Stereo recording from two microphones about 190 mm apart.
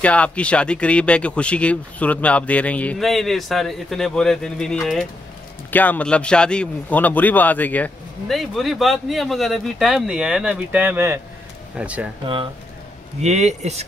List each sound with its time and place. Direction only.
0.0 s a man's voice: 5° left (ahead or behind)
13.2 s speech: 35° right (ahead or behind)